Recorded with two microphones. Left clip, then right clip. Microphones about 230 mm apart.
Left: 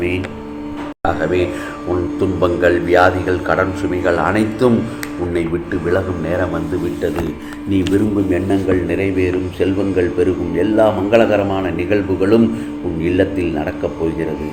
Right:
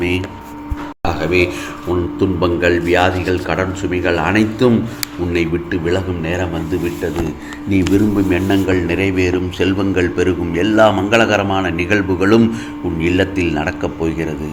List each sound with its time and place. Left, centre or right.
2.4 s speech: right
5.9 s a man's voice: right
7.7 s a man's voice: right